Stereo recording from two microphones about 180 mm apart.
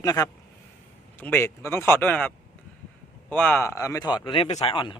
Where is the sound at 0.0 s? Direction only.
20° left (ahead or behind).